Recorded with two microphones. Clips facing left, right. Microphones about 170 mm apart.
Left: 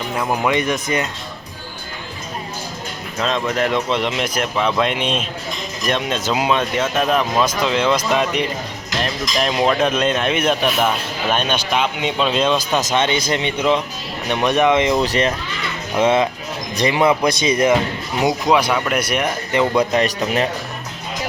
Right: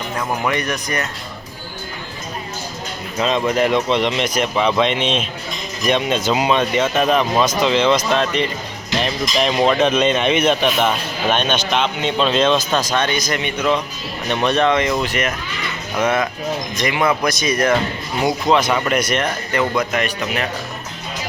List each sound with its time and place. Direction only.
0.2 s speech: 15° left (ahead or behind)
3.2 s speech: centre (ahead or behind)
9.0 s speech: centre (ahead or behind); by 15.0 s 20° left (ahead or behind)
15.0 s speech: 35° left (ahead or behind)
18.7 s speech: 5° left (ahead or behind)
19.7 s speech: 30° left (ahead or behind)